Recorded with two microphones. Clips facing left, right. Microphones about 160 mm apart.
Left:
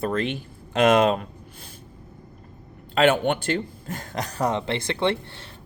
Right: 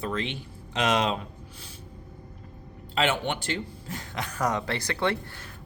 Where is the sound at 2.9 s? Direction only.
50° left (ahead or behind).